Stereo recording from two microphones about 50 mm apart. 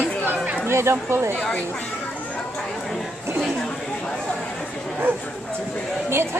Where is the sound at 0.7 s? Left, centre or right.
Right.